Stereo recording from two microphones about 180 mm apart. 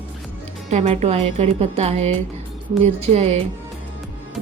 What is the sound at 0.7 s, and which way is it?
A woman's voice, 40° right (ahead or behind).